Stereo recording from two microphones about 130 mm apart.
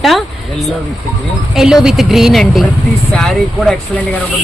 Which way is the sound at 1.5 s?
5° right (ahead or behind).